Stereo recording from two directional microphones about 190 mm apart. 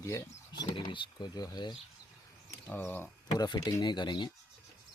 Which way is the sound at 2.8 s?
10° left (ahead or behind).